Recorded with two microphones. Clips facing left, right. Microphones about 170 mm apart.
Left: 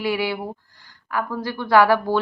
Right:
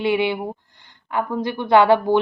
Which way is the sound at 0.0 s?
20° right (ahead or behind).